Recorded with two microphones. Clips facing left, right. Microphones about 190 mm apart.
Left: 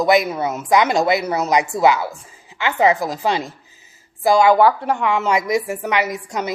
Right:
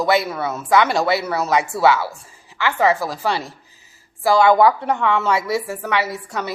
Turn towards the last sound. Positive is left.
turn(degrees=15)  # may be behind; listen again after turning